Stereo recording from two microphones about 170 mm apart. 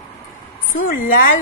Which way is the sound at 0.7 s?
55° left (ahead or behind).